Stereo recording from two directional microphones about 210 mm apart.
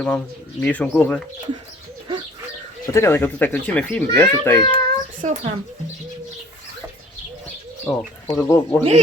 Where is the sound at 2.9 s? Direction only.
10° left (ahead or behind).